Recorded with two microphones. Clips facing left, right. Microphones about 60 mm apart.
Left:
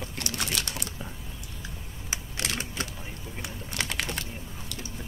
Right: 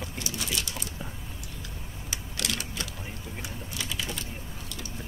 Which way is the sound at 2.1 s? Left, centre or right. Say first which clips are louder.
Even; left.